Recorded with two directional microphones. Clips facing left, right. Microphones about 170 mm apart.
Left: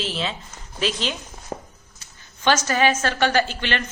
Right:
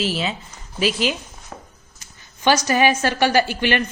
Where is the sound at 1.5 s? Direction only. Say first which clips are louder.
Left 6 dB; 35° left (ahead or behind).